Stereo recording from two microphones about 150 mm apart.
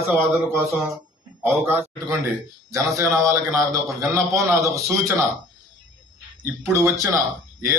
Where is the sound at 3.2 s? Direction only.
20° right (ahead or behind).